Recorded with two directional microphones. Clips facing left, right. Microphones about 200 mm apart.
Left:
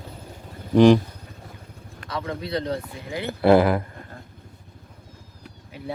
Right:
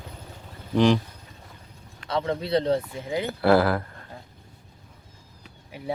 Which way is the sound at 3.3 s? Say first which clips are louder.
Left 4 dB; 20° left (ahead or behind).